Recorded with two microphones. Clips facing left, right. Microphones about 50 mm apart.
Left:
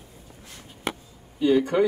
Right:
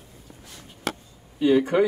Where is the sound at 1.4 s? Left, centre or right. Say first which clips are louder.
Right 1 dB; right.